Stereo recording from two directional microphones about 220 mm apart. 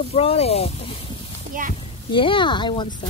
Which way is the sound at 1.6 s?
35° right (ahead or behind).